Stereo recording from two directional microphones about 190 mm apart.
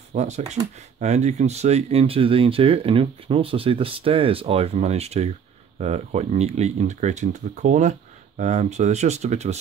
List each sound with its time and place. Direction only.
0.1 s speech: 35° right (ahead or behind)